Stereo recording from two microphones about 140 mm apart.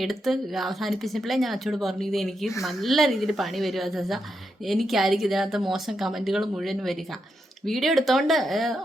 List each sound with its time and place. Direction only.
0.0 s speech: centre (ahead or behind)